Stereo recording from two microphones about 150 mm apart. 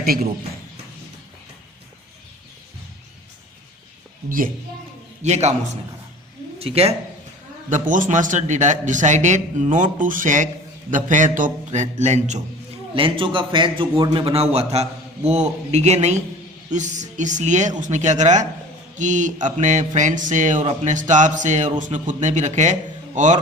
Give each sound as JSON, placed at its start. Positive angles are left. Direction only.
{"t": 5.2, "sound": "a man's voice", "side_deg": -50}
{"t": 7.7, "sound": "speech", "side_deg": -60}
{"t": 12.9, "sound": "a man's voice", "side_deg": -35}